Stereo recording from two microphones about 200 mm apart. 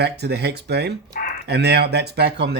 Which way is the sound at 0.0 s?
55° right (ahead or behind).